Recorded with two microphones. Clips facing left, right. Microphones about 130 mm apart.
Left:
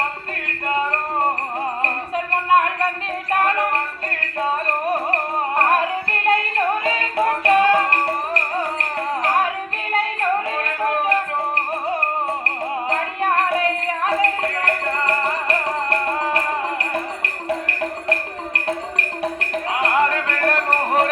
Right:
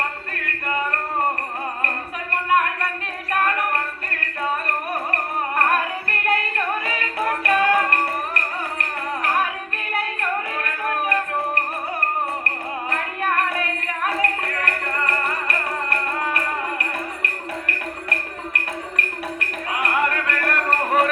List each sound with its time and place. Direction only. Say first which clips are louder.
0.4 s music: left 3 dB; 25° left (ahead or behind)